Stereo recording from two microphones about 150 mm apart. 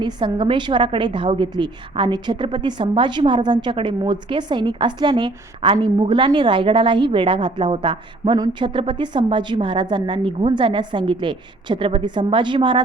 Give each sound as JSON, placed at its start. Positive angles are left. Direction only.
{"t": 0.0, "sound": "a woman's voice", "side_deg": -30}